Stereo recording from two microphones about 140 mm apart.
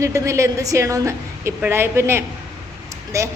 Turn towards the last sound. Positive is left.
turn(degrees=-20)  # may be behind; listen again after turning